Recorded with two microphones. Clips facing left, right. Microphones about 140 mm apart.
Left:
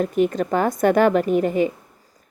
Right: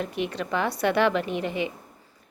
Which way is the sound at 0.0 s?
45° left (ahead or behind).